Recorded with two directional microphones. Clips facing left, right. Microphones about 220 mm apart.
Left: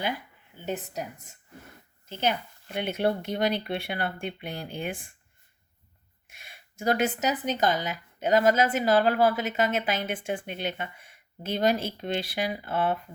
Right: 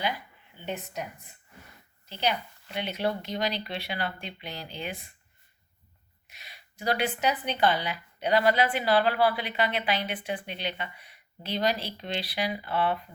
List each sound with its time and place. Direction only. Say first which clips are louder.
0.6 s a woman's voice: left 2 dB; 40° left (ahead or behind)
2.0 s a woman's voice: left 2 dB; 50° left (ahead or behind)
6.2 s a woman's voice: left 1 dB; 50° left (ahead or behind)